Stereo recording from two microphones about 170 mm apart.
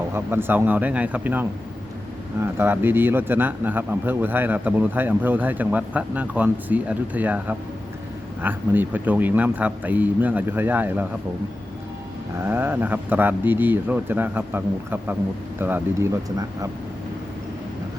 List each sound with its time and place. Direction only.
0.1 s a man's voice: 15° right (ahead or behind)
12.5 s a man's voice: 10° right (ahead or behind)